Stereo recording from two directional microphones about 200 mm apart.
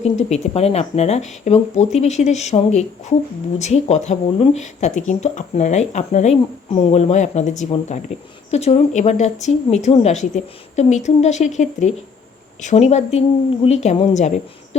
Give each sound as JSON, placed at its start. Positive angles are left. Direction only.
{"t": 0.0, "sound": "speech", "side_deg": 35}